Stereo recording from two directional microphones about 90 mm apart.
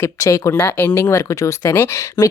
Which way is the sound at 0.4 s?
35° left (ahead or behind).